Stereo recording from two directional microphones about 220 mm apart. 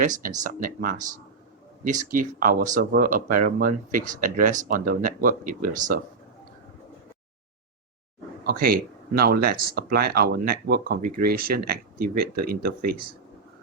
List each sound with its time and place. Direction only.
0.0 s speech: 35° right (ahead or behind)
2.0 s speech: 40° right (ahead or behind)
8.4 s speech: 40° right (ahead or behind)